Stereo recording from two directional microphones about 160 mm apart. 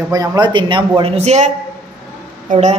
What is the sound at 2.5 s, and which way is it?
Speech, 45° right (ahead or behind).